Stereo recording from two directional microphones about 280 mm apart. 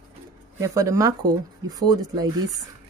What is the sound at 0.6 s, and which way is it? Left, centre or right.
Speech, centre.